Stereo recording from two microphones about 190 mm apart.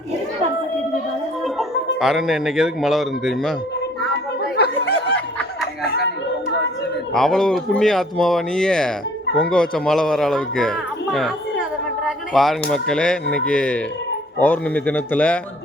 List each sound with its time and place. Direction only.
2.0 s speech: centre (ahead or behind)
4.5 s a sound: 60° left (ahead or behind)
7.1 s speech: centre (ahead or behind)